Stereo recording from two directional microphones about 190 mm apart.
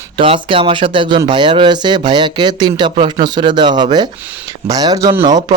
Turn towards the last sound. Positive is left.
turn(degrees=-20)  # may be behind; listen again after turning